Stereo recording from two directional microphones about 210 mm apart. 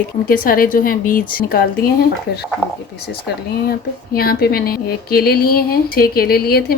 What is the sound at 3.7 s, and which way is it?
Speech, 45° left (ahead or behind).